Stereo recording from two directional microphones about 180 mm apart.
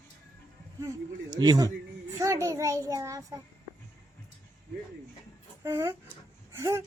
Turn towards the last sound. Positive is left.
turn(degrees=-15)  # may be behind; listen again after turning